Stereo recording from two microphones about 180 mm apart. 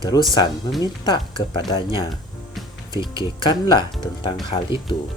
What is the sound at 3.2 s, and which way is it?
Speech, 25° left (ahead or behind).